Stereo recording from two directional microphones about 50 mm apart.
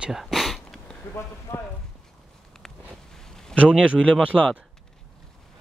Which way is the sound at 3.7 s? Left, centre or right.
Right.